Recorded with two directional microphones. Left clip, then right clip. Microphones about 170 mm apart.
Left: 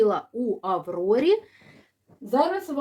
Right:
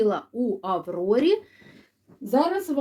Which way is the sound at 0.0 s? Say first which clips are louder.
Left 1 dB; 20° left (ahead or behind).